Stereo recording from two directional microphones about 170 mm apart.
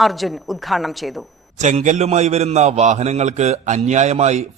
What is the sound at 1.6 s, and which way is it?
A man's voice, 45° right (ahead or behind).